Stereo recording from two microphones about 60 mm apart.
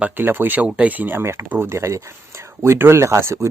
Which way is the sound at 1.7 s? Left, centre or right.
Right.